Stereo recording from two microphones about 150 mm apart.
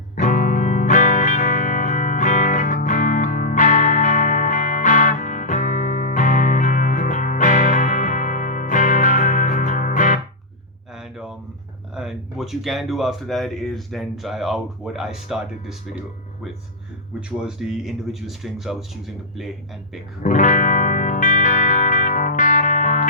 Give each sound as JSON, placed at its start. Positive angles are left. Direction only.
{"t": 0.2, "sound": "music", "side_deg": 60}
{"t": 10.9, "sound": "a sound", "side_deg": -5}
{"t": 11.9, "sound": "speech", "side_deg": -5}
{"t": 17.2, "sound": "speech", "side_deg": -5}
{"t": 20.2, "sound": "music", "side_deg": 60}